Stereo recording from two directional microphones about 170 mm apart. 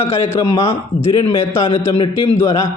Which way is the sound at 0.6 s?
35° left (ahead or behind).